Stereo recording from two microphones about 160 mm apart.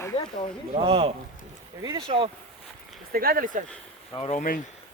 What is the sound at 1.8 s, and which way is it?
Speech, 20° right (ahead or behind).